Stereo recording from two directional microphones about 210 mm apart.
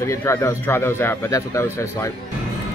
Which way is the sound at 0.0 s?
15° left (ahead or behind).